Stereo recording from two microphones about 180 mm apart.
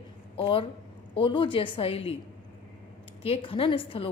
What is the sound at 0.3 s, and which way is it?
A woman's voice, 30° left (ahead or behind).